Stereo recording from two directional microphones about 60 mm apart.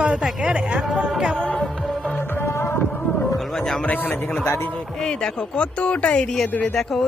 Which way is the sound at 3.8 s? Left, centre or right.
Left.